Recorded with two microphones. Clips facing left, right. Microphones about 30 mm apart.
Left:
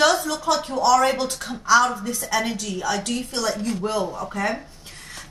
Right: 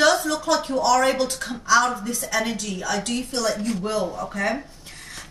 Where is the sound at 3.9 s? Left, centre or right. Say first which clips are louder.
Even; centre.